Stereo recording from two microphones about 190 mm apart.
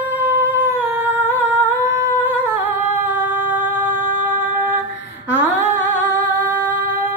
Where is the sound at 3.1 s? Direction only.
10° right (ahead or behind).